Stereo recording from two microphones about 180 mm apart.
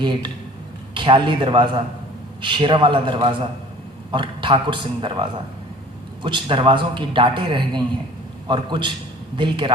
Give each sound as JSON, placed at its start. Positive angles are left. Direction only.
{"t": 0.0, "sound": "a man's voice", "side_deg": -25}